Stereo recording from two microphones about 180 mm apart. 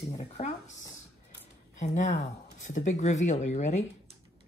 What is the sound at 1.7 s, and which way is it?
Speech, 40° left (ahead or behind).